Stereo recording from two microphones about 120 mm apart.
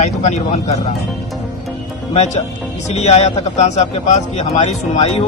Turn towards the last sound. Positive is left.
turn(degrees=60)  # may be behind; listen again after turning